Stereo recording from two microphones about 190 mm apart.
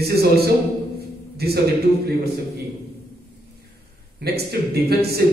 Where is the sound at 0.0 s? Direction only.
55° right (ahead or behind).